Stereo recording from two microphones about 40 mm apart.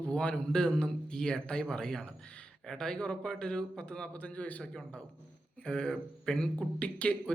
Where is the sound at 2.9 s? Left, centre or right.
Left.